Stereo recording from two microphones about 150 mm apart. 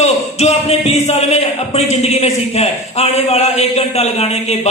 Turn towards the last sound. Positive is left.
turn(degrees=45)  # may be behind; listen again after turning